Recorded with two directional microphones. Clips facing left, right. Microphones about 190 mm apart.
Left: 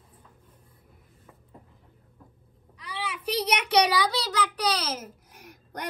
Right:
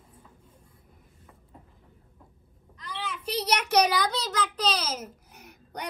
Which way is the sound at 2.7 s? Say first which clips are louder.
Left 1 dB; 10° left (ahead or behind).